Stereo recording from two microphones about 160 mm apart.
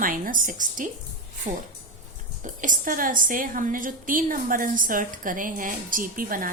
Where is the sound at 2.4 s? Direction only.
55° right (ahead or behind).